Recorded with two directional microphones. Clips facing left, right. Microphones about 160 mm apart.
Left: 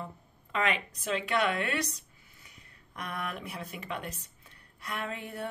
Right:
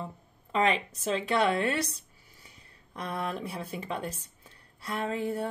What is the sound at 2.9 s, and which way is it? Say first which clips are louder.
Music: right 4 dB; 30° right (ahead or behind).